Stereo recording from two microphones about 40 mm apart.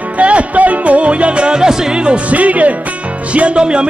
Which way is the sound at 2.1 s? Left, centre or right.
Right.